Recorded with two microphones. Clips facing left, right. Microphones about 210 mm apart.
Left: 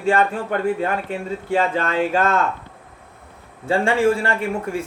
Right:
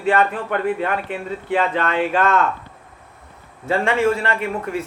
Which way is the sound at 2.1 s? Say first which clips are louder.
Right 1 dB; 25° left (ahead or behind).